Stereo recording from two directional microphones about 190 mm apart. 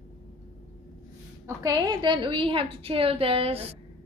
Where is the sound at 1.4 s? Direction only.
20° right (ahead or behind).